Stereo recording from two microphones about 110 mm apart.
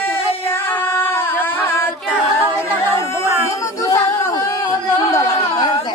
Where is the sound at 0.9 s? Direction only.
20° left (ahead or behind).